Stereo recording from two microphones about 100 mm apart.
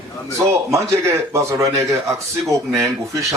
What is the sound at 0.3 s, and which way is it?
Speech, 30° right (ahead or behind).